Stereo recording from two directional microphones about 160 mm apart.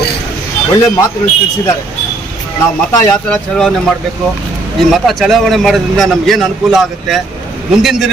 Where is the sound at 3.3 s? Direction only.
5° left (ahead or behind).